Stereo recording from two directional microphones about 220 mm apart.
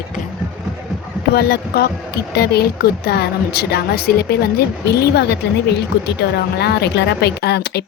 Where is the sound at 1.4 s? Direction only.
45° left (ahead or behind).